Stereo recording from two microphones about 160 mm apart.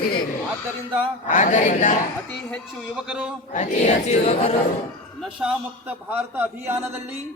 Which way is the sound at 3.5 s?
45° left (ahead or behind).